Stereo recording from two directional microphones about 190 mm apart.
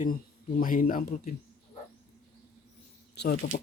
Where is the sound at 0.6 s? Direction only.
50° left (ahead or behind).